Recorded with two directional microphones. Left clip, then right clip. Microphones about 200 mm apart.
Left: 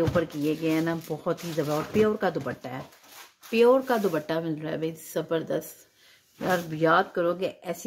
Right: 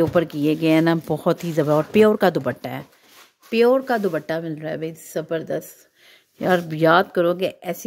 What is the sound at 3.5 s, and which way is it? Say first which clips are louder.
Speech: right 3 dB; 35° right (ahead or behind).